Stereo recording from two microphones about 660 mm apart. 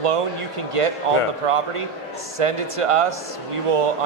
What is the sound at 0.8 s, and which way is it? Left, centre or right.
Speech, right.